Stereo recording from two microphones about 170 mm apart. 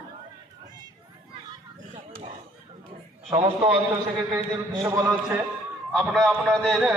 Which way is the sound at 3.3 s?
35° right (ahead or behind).